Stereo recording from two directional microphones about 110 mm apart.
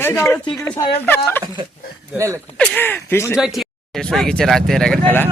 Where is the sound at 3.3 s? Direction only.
5° right (ahead or behind).